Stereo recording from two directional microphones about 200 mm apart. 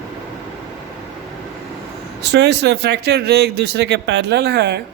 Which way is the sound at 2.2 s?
60° right (ahead or behind).